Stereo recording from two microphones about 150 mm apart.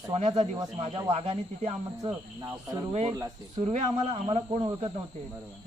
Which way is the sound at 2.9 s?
45° right (ahead or behind).